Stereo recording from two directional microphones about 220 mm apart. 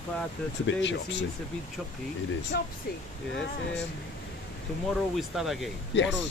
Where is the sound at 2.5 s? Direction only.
45° left (ahead or behind).